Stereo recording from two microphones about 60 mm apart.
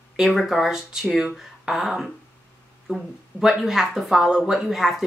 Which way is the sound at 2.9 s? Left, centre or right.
Centre.